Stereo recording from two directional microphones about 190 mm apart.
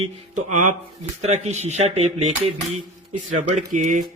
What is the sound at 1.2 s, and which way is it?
Speech, 35° right (ahead or behind).